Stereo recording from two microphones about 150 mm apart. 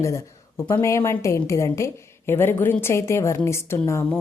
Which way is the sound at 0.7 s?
20° left (ahead or behind).